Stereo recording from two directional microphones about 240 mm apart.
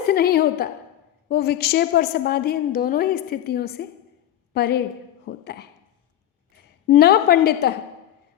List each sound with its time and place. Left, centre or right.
0.1 s a woman's voice: left
6.8 s a woman's voice: left